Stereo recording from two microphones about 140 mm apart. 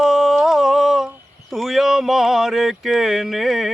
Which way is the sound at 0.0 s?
Centre (ahead or behind).